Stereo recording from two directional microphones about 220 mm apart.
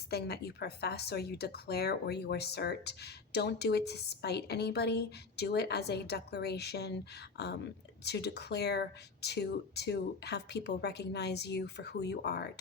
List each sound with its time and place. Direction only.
0.1 s speech: 45° left (ahead or behind)